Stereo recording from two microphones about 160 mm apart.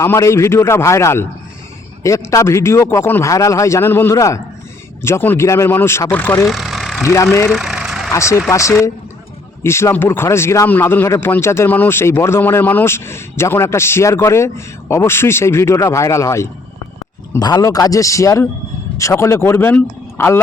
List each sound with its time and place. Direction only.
0.0 s speech: 15° left (ahead or behind)
6.5 s vehicle: centre (ahead or behind)
7.0 s speech: 20° left (ahead or behind)
7.5 s vehicle: 5° right (ahead or behind)
8.1 s speech: 20° left (ahead or behind)